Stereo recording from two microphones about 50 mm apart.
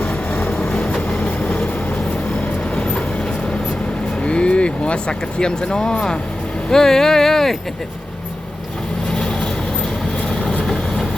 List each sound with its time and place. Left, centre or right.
1.2 s train: left
2.7 s train: left
4.2 s speech: left
9.1 s vehicle: centre